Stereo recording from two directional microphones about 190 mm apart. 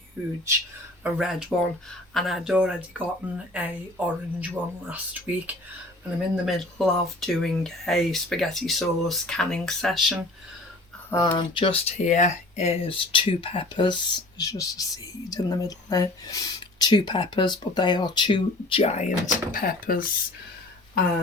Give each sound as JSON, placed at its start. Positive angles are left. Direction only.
{"t": 0.2, "sound": "speech", "side_deg": -10}
{"t": 11.1, "sound": "speech", "side_deg": 20}
{"t": 19.5, "sound": "speech", "side_deg": 50}